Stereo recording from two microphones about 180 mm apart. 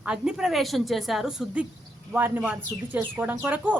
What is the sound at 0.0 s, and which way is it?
A woman's voice, 5° right (ahead or behind).